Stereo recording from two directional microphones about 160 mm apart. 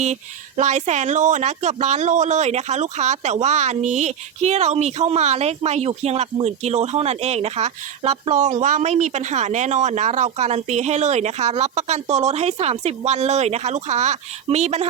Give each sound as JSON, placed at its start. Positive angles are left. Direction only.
{"t": 0.0, "sound": "speech", "side_deg": -45}